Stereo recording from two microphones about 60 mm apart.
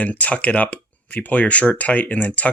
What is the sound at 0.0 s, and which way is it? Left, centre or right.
Speech, left.